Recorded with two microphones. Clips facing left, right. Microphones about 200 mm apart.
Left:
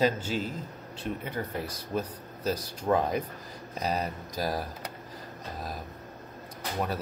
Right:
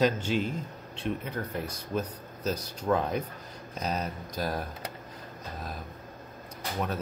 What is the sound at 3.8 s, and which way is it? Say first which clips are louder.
Speech: left 2 dB; 10° left (ahead or behind).